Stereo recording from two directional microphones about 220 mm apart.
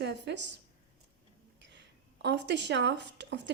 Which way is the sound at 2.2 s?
50° right (ahead or behind).